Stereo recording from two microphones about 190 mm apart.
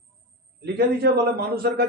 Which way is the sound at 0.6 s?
55° right (ahead or behind).